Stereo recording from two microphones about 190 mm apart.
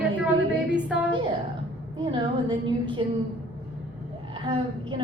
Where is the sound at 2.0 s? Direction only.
25° right (ahead or behind).